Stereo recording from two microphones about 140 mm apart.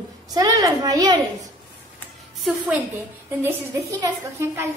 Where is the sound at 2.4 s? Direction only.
5° right (ahead or behind).